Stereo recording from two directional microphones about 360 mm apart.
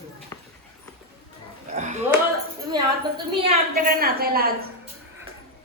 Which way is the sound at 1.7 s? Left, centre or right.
Centre.